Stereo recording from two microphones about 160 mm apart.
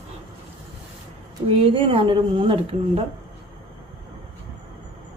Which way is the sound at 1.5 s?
35° right (ahead or behind).